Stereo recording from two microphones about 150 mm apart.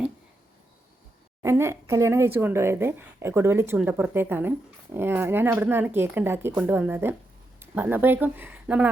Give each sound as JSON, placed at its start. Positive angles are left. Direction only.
{"t": 1.4, "sound": "speech", "side_deg": -15}